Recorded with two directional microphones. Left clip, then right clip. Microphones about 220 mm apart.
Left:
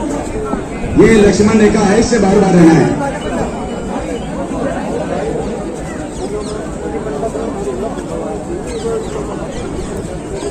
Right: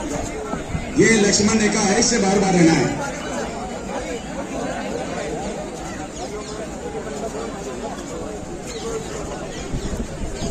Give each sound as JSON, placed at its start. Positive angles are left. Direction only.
{"t": 1.0, "sound": "speech", "side_deg": -50}